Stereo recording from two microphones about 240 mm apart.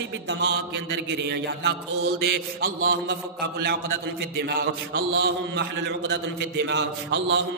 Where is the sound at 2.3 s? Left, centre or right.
Right.